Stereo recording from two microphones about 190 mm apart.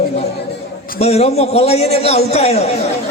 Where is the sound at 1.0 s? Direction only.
35° left (ahead or behind).